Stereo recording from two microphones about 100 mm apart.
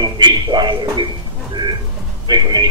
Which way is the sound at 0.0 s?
45° right (ahead or behind).